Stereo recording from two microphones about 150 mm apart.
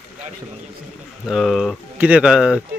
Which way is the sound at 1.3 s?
Centre (ahead or behind).